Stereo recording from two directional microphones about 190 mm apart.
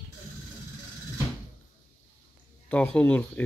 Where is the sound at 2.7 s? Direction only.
5° left (ahead or behind).